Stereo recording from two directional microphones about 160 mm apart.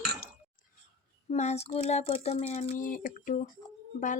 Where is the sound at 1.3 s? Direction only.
45° left (ahead or behind).